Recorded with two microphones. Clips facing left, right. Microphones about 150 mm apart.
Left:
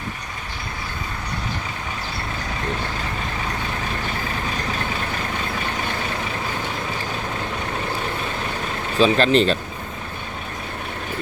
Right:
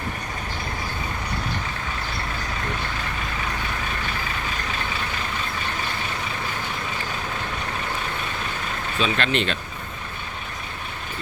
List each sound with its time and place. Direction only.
9.0 s speech: 35° left (ahead or behind)